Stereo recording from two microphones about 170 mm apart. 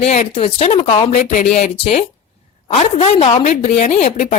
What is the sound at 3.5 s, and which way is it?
Speech, 45° left (ahead or behind).